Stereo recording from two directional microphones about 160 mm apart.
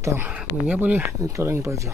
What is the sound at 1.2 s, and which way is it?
Speech, 20° right (ahead or behind).